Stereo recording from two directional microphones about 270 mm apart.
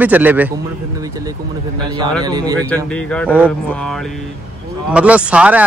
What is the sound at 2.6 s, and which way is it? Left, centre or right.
Speech, centre.